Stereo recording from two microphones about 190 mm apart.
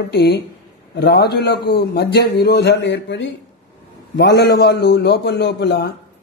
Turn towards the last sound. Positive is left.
turn(degrees=60)  # may be behind; listen again after turning